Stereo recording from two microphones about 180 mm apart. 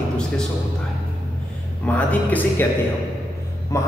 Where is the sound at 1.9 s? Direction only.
10° left (ahead or behind).